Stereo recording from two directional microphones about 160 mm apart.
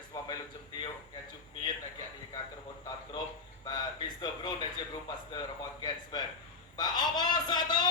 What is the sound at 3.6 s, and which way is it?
Speech, 25° left (ahead or behind).